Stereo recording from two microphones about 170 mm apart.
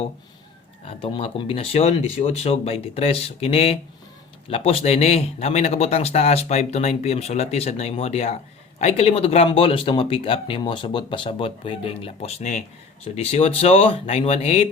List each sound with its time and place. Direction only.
0.9 s speech: 30° left (ahead or behind)